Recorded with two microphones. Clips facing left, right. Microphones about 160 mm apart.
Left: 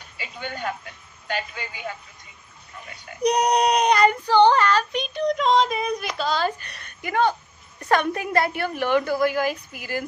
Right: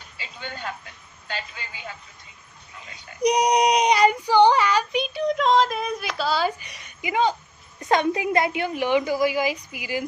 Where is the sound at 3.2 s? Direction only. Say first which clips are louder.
Even; 10° right (ahead or behind).